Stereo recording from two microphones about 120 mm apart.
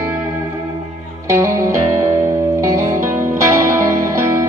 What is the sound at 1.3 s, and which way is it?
Music, 25° right (ahead or behind).